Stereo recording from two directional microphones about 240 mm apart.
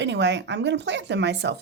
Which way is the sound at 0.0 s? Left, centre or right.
Right.